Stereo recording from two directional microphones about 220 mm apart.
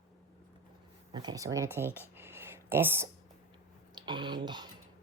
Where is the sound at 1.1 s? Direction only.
20° right (ahead or behind).